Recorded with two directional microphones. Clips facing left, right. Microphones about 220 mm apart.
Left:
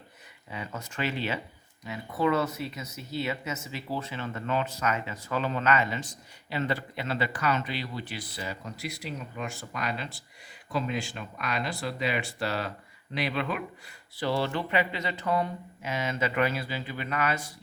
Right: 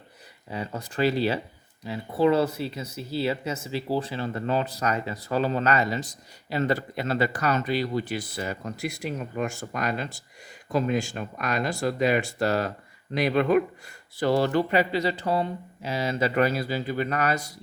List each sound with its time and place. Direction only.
0.5 s speech: 35° right (ahead or behind)